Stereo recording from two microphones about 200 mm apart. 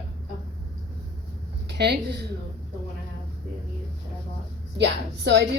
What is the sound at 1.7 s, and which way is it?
Speech, 55° right (ahead or behind).